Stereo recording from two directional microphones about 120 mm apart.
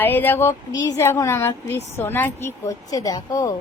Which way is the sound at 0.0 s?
15° left (ahead or behind).